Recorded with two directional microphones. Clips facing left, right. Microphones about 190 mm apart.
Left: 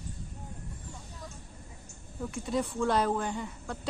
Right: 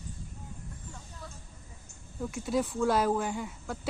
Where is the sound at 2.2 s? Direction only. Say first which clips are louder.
Right 1 dB; centre (ahead or behind).